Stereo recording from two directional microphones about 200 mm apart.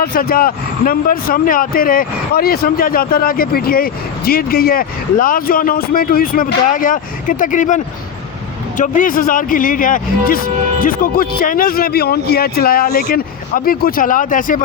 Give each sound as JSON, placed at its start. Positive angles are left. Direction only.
{"t": 0.0, "sound": "speech", "side_deg": 50}
{"t": 8.8, "sound": "speech", "side_deg": 40}